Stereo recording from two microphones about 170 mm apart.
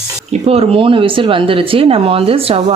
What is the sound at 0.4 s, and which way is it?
Speech, 35° right (ahead or behind).